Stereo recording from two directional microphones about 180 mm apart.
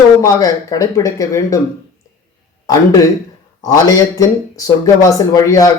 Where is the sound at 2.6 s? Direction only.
20° left (ahead or behind).